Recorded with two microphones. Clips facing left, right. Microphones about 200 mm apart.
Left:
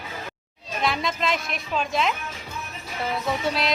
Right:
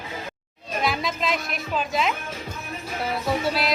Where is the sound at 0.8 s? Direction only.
Centre (ahead or behind).